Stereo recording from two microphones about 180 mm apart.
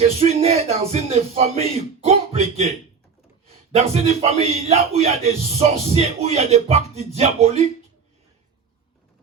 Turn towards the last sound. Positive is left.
turn(degrees=-35)  # may be behind; listen again after turning